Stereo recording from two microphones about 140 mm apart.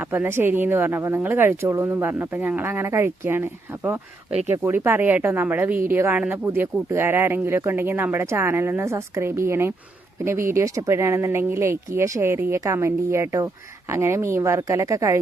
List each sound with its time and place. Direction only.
0.0 s speech: 15° right (ahead or behind)